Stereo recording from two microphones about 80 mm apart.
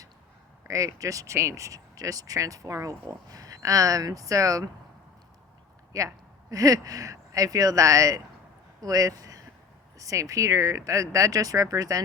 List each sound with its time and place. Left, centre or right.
0.6 s speech: right
5.9 s speech: right